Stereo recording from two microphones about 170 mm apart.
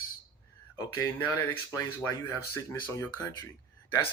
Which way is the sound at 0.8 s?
20° left (ahead or behind).